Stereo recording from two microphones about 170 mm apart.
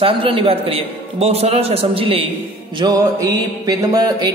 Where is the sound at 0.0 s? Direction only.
30° right (ahead or behind).